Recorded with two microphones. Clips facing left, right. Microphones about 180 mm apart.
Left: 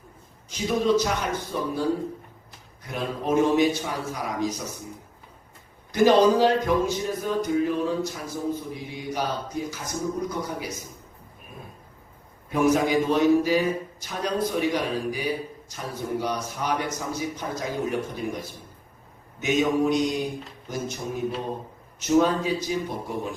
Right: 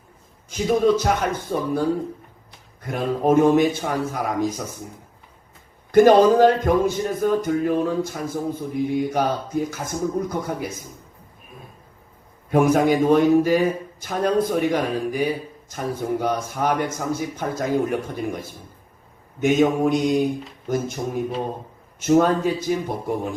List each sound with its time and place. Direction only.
0.5 s speech: 50° right (ahead or behind)
2.8 s speech: 50° right (ahead or behind)
5.9 s speech: 50° right (ahead or behind)
12.5 s speech: 50° right (ahead or behind)
21.9 s speech: 50° right (ahead or behind)